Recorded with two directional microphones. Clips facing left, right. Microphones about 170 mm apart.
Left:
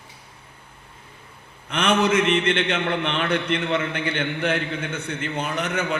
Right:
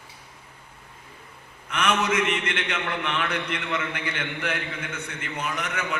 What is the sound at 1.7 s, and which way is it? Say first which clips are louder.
A man's voice: left 4 dB; 30° left (ahead or behind).